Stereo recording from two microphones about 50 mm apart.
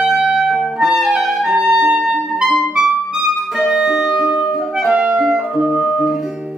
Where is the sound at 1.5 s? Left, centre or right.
Right.